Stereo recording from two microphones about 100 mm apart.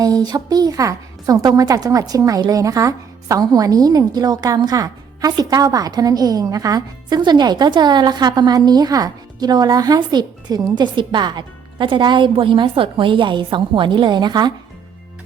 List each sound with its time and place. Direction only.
0.0 s a woman's voice: 40° right (ahead or behind)